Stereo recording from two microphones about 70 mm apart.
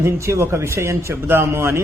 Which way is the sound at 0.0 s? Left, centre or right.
Right.